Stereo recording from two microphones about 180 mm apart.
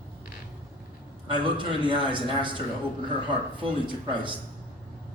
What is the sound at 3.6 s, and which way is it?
Speech, 25° right (ahead or behind).